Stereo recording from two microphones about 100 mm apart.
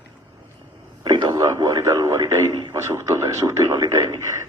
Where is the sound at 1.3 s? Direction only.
30° right (ahead or behind).